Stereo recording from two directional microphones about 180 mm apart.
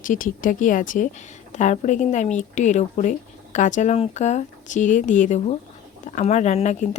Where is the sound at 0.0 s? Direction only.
50° left (ahead or behind).